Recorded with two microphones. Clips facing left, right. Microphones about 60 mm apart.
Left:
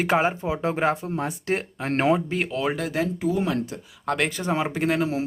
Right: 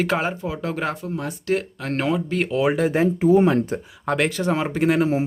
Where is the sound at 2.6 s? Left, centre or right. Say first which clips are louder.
Right 8 dB; centre.